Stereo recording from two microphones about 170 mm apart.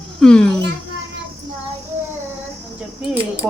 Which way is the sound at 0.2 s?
5° left (ahead or behind).